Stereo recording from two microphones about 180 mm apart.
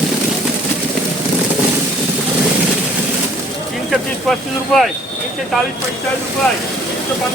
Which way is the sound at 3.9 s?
Centre (ahead or behind).